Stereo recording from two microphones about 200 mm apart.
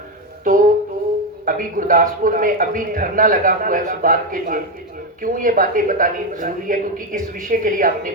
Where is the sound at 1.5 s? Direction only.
45° right (ahead or behind).